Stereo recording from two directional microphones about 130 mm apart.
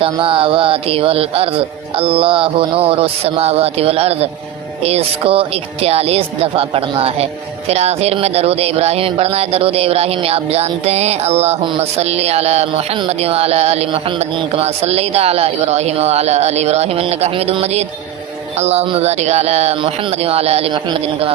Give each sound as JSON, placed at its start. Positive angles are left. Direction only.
{"t": 0.0, "sound": "speech", "side_deg": -45}